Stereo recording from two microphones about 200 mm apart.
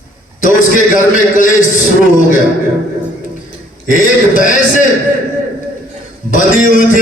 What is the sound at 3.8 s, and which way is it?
Speech, 40° left (ahead or behind).